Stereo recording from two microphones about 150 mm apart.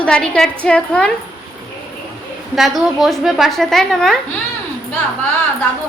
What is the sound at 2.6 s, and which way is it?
A woman's voice, centre (ahead or behind).